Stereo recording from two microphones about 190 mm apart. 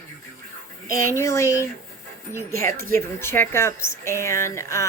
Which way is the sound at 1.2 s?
15° left (ahead or behind).